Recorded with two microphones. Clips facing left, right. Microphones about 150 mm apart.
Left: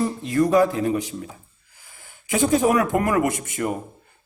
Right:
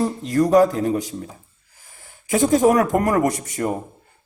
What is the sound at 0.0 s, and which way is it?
A man's voice, 40° right (ahead or behind).